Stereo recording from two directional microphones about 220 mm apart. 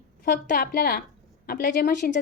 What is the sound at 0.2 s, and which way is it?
A woman's voice, 40° left (ahead or behind).